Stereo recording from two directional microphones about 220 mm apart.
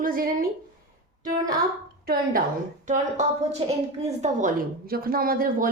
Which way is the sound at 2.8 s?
35° right (ahead or behind).